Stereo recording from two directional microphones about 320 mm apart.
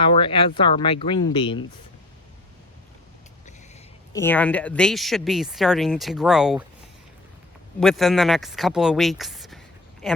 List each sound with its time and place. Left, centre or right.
0.0 s speech: centre
4.1 s speech: centre
7.8 s speech: centre